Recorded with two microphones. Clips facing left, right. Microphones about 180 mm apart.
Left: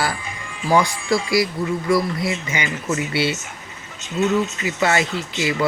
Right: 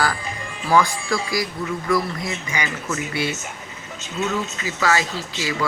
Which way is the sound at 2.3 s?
25° left (ahead or behind).